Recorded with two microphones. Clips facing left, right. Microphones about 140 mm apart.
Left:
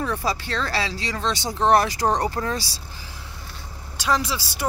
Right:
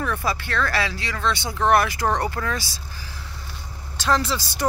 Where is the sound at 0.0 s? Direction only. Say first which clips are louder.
Even; 30° left (ahead or behind).